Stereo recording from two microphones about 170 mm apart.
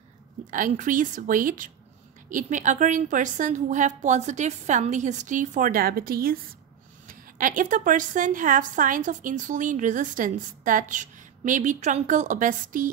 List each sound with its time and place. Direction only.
0.5 s a woman's voice: 50° right (ahead or behind)